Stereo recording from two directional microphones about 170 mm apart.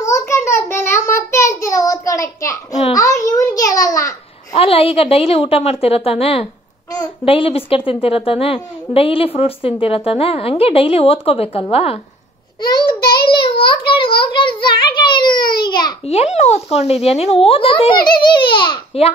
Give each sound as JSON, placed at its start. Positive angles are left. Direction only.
{"t": 0.0, "sound": "child singing", "side_deg": 15}
{"t": 2.9, "sound": "a sound", "side_deg": 20}
{"t": 4.6, "sound": "a woman's voice", "side_deg": 35}
{"t": 13.3, "sound": "a sound", "side_deg": 30}
{"t": 15.6, "sound": "babbling", "side_deg": 25}
{"t": 16.1, "sound": "a woman's voice", "side_deg": 40}